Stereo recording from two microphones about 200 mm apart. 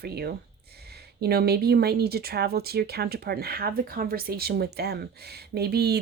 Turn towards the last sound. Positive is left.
turn(degrees=-55)  # may be behind; listen again after turning